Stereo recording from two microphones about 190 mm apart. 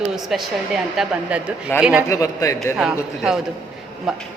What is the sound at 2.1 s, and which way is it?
Speech, 15° left (ahead or behind).